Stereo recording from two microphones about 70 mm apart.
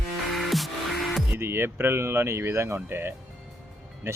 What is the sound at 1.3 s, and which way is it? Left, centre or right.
Speech, right.